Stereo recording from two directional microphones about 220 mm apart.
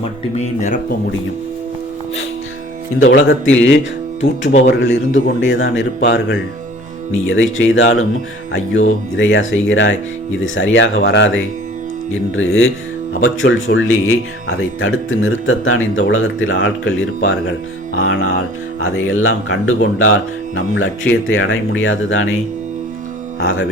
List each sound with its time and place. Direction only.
0.3 s speech: 35° left (ahead or behind)
3.2 s speech: 60° left (ahead or behind)
23.4 s speech: 70° left (ahead or behind)